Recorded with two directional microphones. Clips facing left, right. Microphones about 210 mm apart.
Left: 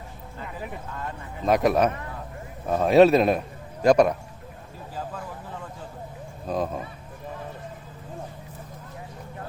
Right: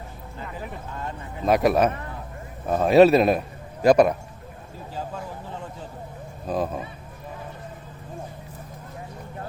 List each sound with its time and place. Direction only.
1.5 s a man's voice: 5° right (ahead or behind)
4.9 s a sound: 25° right (ahead or behind)
6.5 s a man's voice: centre (ahead or behind)